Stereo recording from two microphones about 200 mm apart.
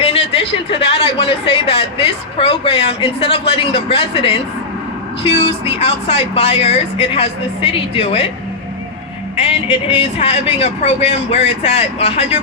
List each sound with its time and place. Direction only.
0.0 s speech: 30° left (ahead or behind)
9.4 s a man's voice: 30° left (ahead or behind)